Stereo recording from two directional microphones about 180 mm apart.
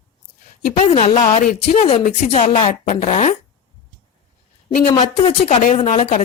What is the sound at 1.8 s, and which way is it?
Speech, 35° left (ahead or behind).